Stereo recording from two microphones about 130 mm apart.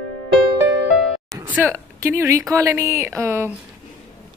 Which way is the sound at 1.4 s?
15° right (ahead or behind).